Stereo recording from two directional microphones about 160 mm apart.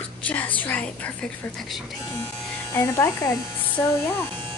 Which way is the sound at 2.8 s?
15° left (ahead or behind).